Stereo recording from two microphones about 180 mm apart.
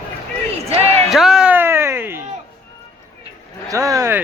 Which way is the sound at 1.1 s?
Centre (ahead or behind).